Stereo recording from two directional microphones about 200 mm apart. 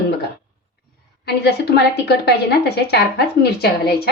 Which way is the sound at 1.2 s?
55° left (ahead or behind).